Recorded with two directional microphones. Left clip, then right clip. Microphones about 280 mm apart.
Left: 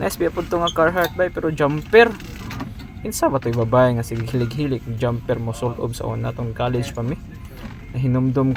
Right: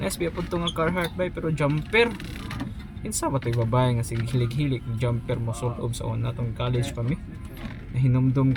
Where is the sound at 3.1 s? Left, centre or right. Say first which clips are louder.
Left 8 dB; left.